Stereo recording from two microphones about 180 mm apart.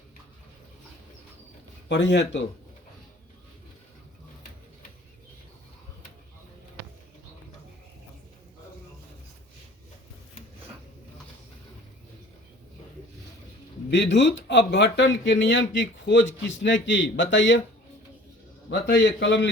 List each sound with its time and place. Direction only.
1.9 s a man's voice: 75° left (ahead or behind)
13.9 s speech: 80° left
18.7 s a man's voice: 70° left (ahead or behind)